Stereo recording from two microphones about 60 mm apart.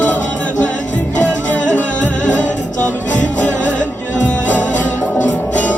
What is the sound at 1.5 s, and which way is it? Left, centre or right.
Music, left.